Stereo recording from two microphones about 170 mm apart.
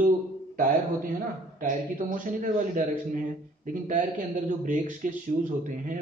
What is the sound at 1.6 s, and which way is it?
Speech, 50° right (ahead or behind).